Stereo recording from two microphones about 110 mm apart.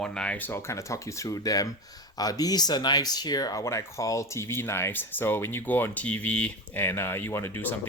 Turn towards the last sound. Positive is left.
turn(degrees=20)  # may be behind; listen again after turning